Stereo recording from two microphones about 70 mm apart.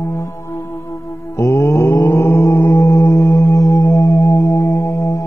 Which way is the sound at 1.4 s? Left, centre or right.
Left.